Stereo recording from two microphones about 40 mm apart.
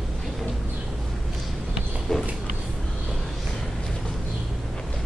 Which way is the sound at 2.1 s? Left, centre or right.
Centre.